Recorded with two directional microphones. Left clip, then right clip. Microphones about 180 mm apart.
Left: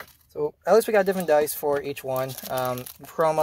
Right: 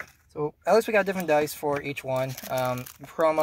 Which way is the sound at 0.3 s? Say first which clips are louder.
Left 2 dB; 25° left (ahead or behind).